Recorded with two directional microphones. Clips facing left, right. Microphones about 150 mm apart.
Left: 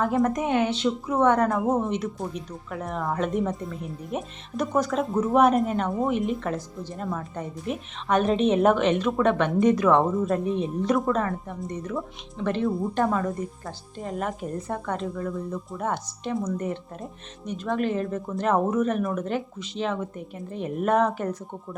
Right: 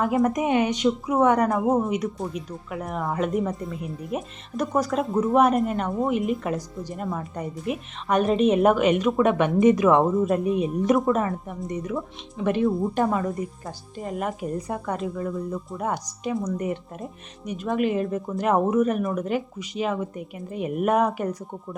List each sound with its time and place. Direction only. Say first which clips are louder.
0.0 s speech: right 1 dB; 5° right (ahead or behind)
1.5 s speech: right 2 dB; centre (ahead or behind)
13.1 s speech: right 1 dB; 5° right (ahead or behind)